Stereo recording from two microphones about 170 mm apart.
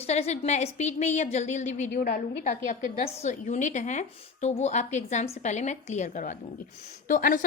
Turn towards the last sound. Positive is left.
turn(degrees=50)  # may be behind; listen again after turning